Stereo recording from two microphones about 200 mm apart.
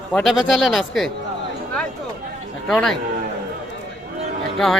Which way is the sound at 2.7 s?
Centre (ahead or behind).